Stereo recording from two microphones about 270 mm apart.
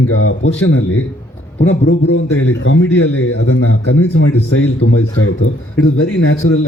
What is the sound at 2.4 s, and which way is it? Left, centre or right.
A man's voice, left.